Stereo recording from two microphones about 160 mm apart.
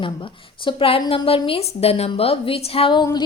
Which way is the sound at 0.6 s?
35° left (ahead or behind).